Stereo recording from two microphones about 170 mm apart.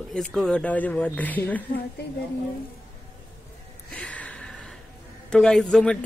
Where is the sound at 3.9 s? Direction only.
5° left (ahead or behind).